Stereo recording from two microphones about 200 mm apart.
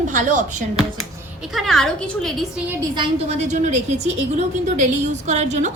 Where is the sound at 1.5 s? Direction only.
Centre (ahead or behind).